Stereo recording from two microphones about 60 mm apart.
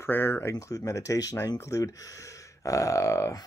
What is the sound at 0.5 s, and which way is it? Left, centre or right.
Speech, left.